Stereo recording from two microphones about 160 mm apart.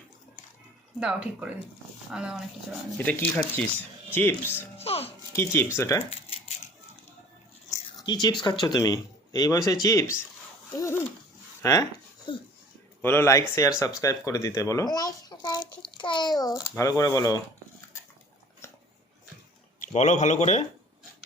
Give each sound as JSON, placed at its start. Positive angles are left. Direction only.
{"t": 0.9, "sound": "speech", "side_deg": -5}
{"t": 3.0, "sound": "speech", "side_deg": 10}
{"t": 4.8, "sound": "speech", "side_deg": 40}
{"t": 5.3, "sound": "speech", "side_deg": 15}
{"t": 7.9, "sound": "speech", "side_deg": 25}
{"t": 11.6, "sound": "a sound", "side_deg": 20}
{"t": 13.0, "sound": "speech", "side_deg": 15}
{"t": 18.6, "sound": "biting", "side_deg": 15}
{"t": 19.9, "sound": "speech", "side_deg": 45}